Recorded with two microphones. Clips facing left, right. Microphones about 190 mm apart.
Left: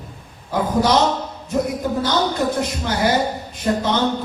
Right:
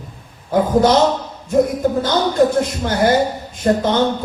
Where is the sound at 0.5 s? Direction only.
50° right (ahead or behind).